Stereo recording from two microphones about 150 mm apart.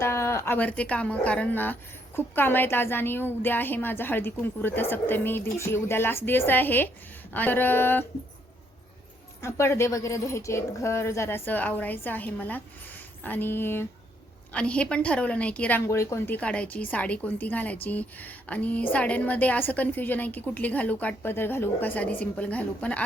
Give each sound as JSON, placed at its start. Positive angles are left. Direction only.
{"t": 0.0, "sound": "a woman's voice", "side_deg": 20}
{"t": 9.4, "sound": "a woman's voice", "side_deg": 20}